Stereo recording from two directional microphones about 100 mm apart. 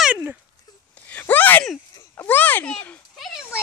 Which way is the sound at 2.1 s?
20° left (ahead or behind).